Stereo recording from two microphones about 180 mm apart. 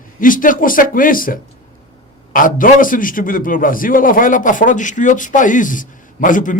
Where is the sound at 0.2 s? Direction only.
50° left (ahead or behind).